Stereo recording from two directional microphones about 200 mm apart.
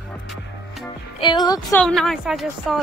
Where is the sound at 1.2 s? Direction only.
20° left (ahead or behind).